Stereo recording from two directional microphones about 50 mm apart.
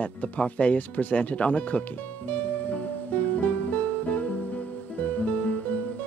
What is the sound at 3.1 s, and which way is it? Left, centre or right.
Music, left.